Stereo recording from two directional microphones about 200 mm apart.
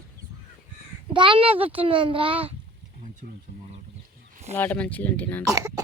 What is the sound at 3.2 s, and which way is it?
Speech, 65° right (ahead or behind).